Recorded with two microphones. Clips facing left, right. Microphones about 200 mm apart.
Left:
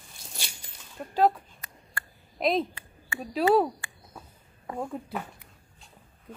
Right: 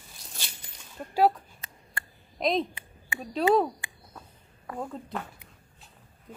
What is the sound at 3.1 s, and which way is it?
Speech, 20° right (ahead or behind).